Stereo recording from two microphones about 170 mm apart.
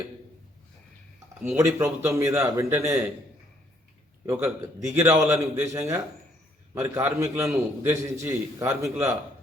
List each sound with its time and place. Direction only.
1.5 s a man's voice: 15° right (ahead or behind)
4.3 s a man's voice: 15° right (ahead or behind)